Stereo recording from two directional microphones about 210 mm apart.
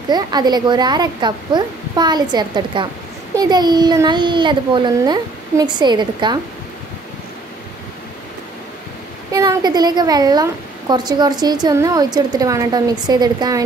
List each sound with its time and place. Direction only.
0.1 s a woman's voice: 20° right (ahead or behind)
9.3 s a woman's voice: 15° right (ahead or behind)